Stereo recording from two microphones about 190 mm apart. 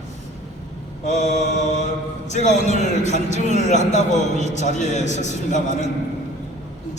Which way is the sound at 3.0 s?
40° left (ahead or behind).